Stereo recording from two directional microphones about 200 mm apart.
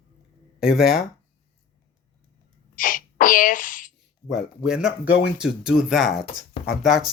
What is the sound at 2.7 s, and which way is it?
Speech, 45° left (ahead or behind).